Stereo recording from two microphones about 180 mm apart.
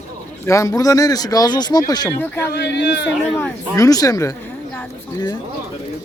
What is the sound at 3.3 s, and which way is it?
Speech, 15° left (ahead or behind).